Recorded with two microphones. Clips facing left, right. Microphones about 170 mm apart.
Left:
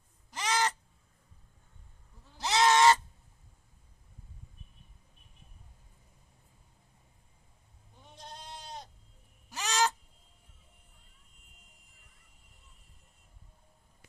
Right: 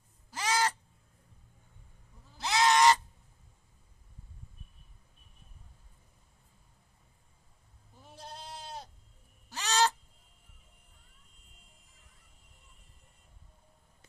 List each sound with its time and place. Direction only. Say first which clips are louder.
0.3 s crow: even; 10° right (ahead or behind)
2.4 s goose: left 1 dB; 20° left (ahead or behind)
7.9 s goat: right 2 dB; 5° right (ahead or behind)
9.6 s owl: right 2 dB; 10° left (ahead or behind)